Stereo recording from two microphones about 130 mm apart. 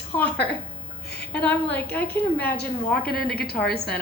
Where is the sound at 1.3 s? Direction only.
10° left (ahead or behind).